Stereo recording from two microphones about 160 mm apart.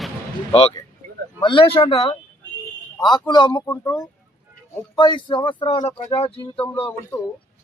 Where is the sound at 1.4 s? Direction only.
30° left (ahead or behind).